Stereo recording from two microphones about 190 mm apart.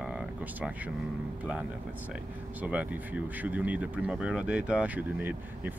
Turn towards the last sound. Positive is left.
turn(degrees=-10)  # may be behind; listen again after turning